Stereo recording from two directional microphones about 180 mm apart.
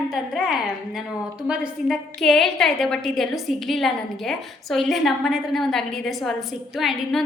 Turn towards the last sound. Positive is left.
turn(degrees=0)  # may be behind; listen again after turning